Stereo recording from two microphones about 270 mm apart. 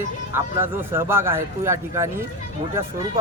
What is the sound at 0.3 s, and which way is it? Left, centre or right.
A man's voice, centre.